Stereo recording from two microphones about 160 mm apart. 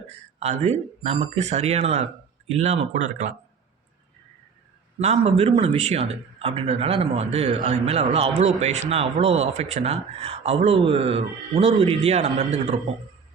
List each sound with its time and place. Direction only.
0.3 s speech: 45° right (ahead or behind)
4.9 s a man's voice: 40° right (ahead or behind)